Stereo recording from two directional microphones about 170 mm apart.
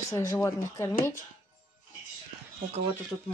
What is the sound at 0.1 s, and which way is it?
Speech, 20° left (ahead or behind).